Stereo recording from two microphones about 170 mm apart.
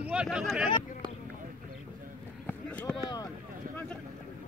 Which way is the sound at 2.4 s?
10° left (ahead or behind).